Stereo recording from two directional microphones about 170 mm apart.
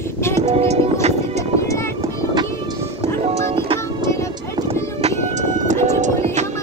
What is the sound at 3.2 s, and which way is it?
Music, 35° right (ahead or behind).